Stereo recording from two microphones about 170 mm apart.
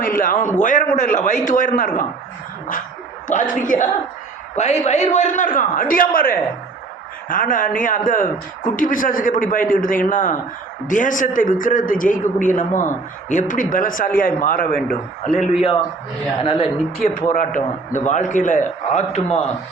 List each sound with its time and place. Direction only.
0.0 s speech: 55° left (ahead or behind)
3.2 s speech: 50° left (ahead or behind)
16.4 s speech: 30° left (ahead or behind)
17.0 s a man's voice: 55° left (ahead or behind)